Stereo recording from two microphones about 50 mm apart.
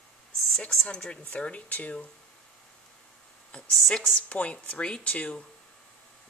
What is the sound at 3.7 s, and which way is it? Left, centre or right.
Speech, centre.